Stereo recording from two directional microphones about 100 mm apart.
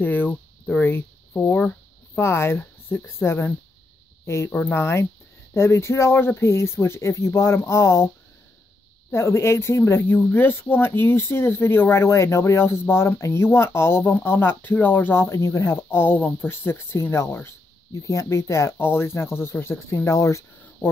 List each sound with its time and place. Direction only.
0.0 s a sound: 20° left (ahead or behind)
4.5 s speech: 15° left (ahead or behind)
9.1 s speech: 25° left (ahead or behind)